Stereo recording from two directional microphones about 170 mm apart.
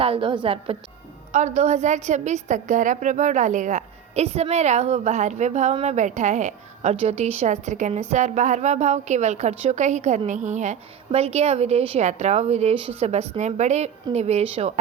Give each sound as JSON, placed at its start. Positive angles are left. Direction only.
{"t": 0.0, "sound": "a woman's voice", "side_deg": -30}
{"t": 1.3, "sound": "a woman's voice", "side_deg": -45}